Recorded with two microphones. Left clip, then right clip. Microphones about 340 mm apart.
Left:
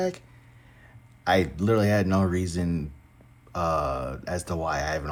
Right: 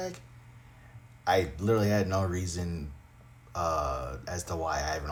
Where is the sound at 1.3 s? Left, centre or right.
Left.